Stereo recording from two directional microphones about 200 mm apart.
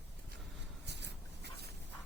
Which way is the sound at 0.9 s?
60° right (ahead or behind).